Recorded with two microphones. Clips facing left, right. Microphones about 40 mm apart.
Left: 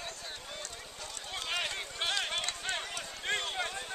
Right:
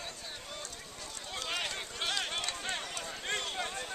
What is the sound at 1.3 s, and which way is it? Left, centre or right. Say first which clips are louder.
Run: left 1 dB; centre.